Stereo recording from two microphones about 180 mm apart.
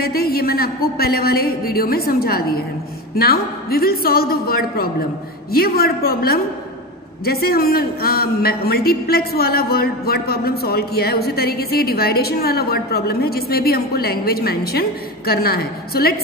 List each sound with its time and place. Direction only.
0.0 s a man's voice: 55° left (ahead or behind)